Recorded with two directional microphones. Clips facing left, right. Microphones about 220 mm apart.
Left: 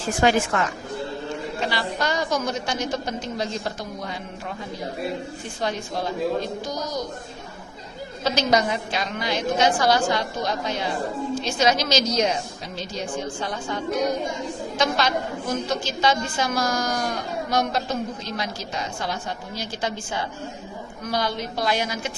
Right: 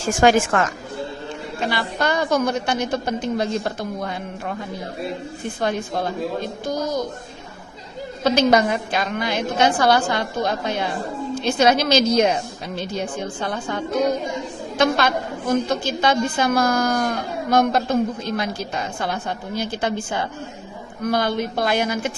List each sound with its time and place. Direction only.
0.0 s a woman's voice: 45° right (ahead or behind)
1.7 s a woman's voice: 55° right (ahead or behind)
5.5 s a woman's voice: 55° right (ahead or behind)
8.2 s a woman's voice: 55° right (ahead or behind)